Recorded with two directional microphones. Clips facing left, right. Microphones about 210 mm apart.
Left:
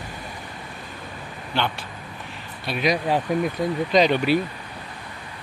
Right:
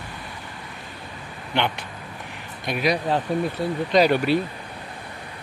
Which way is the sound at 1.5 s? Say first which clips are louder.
Right 1 dB; 15° right (ahead or behind).